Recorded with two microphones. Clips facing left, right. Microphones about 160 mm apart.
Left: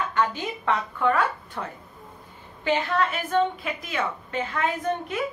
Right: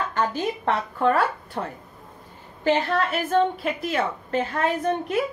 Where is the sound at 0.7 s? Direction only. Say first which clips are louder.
Right 1 dB; 35° right (ahead or behind).